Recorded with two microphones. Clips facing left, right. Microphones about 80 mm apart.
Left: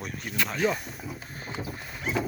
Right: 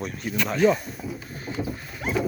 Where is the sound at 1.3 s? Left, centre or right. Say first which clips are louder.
Right 4 dB; left.